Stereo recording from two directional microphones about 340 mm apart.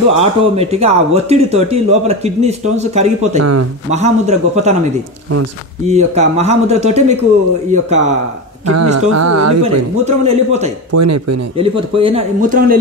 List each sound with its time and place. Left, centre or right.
0.1 s speech: centre
3.3 s speech: right
3.9 s speech: centre
5.9 s speech: centre
8.6 s speech: right
10.0 s speech: centre
10.9 s speech: right
11.5 s speech: centre